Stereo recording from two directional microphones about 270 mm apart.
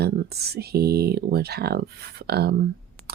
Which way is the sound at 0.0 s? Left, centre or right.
Right.